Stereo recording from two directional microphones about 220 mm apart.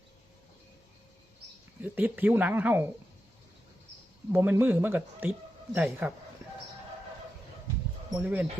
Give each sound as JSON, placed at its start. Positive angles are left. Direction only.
{"t": 1.8, "sound": "a man's voice", "side_deg": -10}
{"t": 4.3, "sound": "a man's voice", "side_deg": -10}
{"t": 8.2, "sound": "a man's voice", "side_deg": -10}